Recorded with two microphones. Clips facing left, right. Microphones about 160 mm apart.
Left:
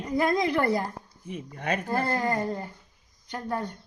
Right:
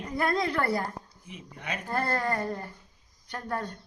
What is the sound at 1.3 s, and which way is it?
Speech, 50° left (ahead or behind).